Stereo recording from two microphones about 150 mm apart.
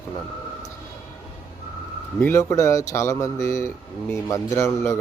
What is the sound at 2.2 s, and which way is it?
A man's voice, 20° left (ahead or behind).